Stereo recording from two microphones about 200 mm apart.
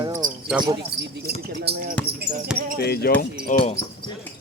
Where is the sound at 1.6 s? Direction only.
45° right (ahead or behind).